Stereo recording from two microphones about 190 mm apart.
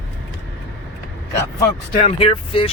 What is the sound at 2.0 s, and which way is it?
Speech, 30° left (ahead or behind).